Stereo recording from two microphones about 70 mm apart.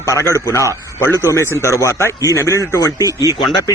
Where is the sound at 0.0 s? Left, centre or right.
Left.